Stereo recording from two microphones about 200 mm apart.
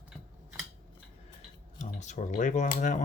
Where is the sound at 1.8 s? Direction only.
35° left (ahead or behind).